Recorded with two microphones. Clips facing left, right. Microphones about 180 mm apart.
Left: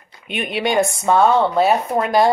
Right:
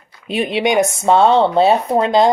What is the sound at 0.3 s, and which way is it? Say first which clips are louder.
Speech: right 4 dB; 30° right (ahead or behind).